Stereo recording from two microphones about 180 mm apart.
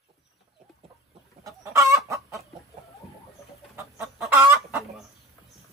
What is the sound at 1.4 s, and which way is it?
Chicken, 15° right (ahead or behind).